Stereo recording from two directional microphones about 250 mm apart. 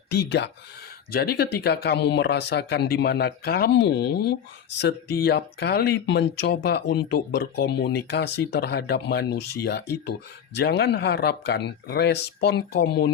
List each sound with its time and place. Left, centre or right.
0.1 s speech: left